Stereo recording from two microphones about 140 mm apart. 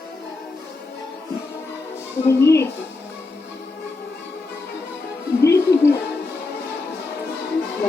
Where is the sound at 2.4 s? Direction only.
20° left (ahead or behind).